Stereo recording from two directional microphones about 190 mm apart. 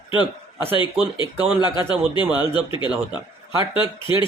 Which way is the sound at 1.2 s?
20° left (ahead or behind).